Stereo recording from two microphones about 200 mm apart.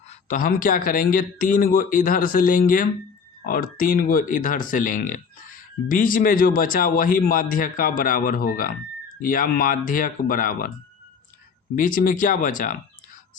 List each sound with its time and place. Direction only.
0.1 s speech: 40° left (ahead or behind)
11.8 s speech: 45° left (ahead or behind)